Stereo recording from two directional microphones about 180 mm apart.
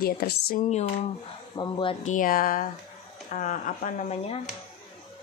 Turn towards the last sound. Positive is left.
turn(degrees=40)  # may be behind; listen again after turning